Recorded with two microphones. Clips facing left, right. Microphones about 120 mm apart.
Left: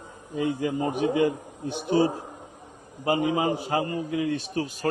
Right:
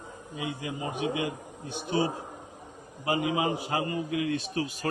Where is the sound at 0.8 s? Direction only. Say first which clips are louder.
Left 7 dB; 40° left (ahead or behind).